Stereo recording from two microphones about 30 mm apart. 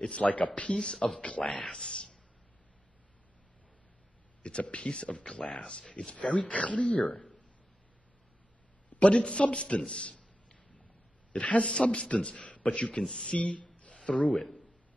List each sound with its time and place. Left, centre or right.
0.0 s speech: left
0.7 s speech: left
1.2 s speech: left
1.6 s speech: left
4.4 s speech: left
6.4 s speech: left
7.1 s a sound: left
9.0 s a man's voice: left
11.6 s speech: left
13.1 s speech: left
13.4 s a sound: left